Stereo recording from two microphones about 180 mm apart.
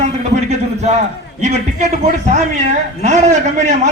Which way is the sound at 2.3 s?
45° right (ahead or behind).